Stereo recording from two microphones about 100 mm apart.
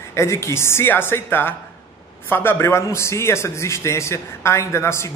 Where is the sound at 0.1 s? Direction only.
30° left (ahead or behind).